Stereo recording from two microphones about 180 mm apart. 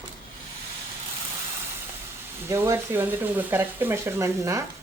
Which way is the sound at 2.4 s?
15° right (ahead or behind).